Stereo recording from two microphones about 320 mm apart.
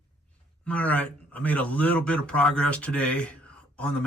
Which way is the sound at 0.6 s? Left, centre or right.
Centre.